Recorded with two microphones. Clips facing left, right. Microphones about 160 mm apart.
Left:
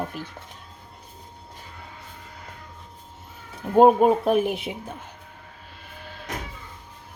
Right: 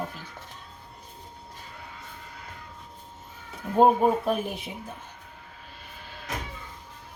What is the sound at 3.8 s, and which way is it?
Speech, 70° left (ahead or behind).